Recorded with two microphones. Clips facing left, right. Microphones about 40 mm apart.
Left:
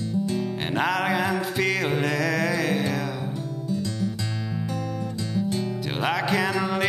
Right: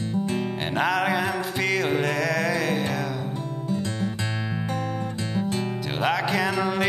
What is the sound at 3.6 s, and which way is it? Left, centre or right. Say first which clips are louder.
Music: even; right.